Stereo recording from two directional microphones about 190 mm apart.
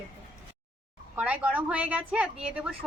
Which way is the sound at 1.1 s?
5° right (ahead or behind).